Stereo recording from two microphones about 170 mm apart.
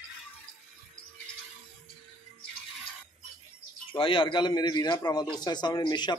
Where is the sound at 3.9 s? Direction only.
30° left (ahead or behind).